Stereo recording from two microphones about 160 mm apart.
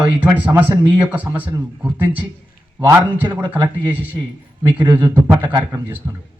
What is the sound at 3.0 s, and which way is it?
Speech, 10° right (ahead or behind).